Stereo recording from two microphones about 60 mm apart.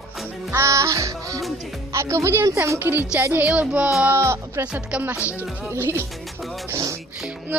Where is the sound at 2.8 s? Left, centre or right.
Right.